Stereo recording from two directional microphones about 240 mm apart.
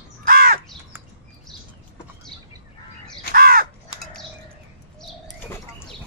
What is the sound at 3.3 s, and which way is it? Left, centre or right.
Crow, right.